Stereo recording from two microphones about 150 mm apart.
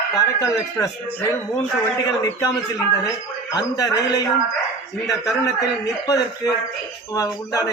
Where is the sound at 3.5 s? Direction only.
25° left (ahead or behind).